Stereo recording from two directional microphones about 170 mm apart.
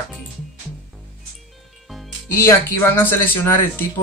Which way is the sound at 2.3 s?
15° left (ahead or behind).